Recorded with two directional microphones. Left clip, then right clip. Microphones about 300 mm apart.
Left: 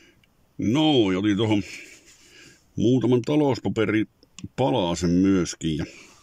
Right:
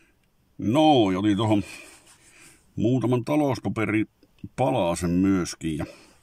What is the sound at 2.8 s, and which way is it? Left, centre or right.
Speech, right.